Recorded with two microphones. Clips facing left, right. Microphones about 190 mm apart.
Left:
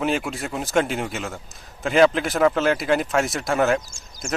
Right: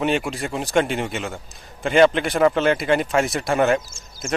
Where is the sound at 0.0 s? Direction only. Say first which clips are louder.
Right 2 dB; centre (ahead or behind).